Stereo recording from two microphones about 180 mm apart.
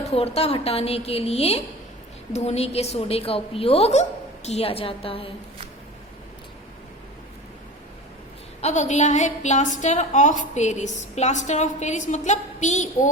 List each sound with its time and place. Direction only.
0.0 s a woman's voice: 35° left (ahead or behind)
8.6 s a woman's voice: 40° left (ahead or behind)